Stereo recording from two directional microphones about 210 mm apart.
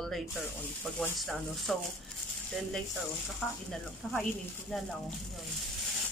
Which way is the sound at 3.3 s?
5° left (ahead or behind).